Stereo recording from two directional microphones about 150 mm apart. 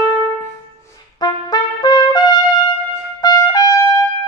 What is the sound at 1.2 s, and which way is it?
Trumpet, 30° left (ahead or behind).